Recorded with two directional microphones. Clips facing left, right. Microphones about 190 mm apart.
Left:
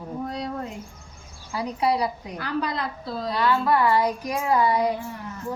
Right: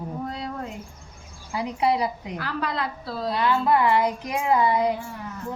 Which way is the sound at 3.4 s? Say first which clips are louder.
Even; 25° right (ahead or behind).